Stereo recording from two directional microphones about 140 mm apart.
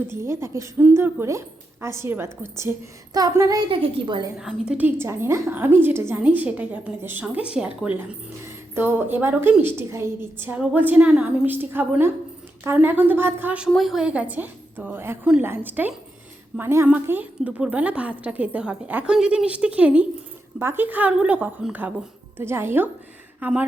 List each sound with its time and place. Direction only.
0.1 s a woman's voice: 20° right (ahead or behind)
3.7 s a woman's voice: 40° right (ahead or behind)
4.4 s a woman's voice: 5° right (ahead or behind)
13.7 s a woman's voice: centre (ahead or behind)